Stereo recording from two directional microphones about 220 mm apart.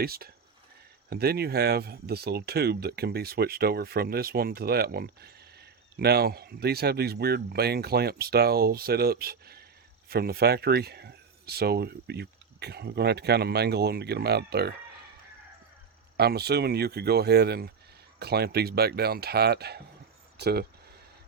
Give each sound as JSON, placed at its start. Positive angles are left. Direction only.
{"t": 0.0, "sound": "speech", "side_deg": -45}
{"t": 16.1, "sound": "speech", "side_deg": -45}